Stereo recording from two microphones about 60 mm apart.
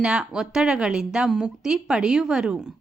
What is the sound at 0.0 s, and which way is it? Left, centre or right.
Speech, centre.